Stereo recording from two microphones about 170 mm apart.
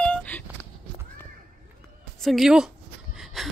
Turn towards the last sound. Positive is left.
turn(degrees=0)  # may be behind; listen again after turning